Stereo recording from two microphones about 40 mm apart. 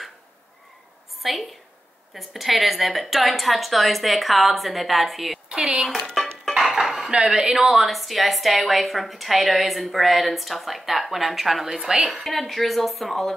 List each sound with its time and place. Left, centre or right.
1.2 s a woman's voice: centre
5.5 s speech: right
6.2 s music: centre
6.5 s cutlery: centre
7.2 s speech: centre
7.5 s a woman's voice: centre